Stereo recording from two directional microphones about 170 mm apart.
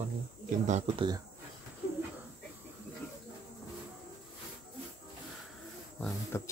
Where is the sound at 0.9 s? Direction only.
25° right (ahead or behind).